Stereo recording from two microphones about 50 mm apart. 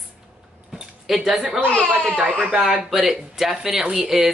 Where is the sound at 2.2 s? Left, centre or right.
Right.